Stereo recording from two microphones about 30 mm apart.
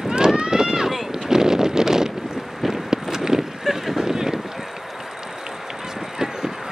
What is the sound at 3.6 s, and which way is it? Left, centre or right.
Boat, centre.